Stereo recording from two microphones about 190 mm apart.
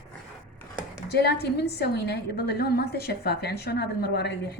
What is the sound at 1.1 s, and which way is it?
A woman's voice, 60° left (ahead or behind).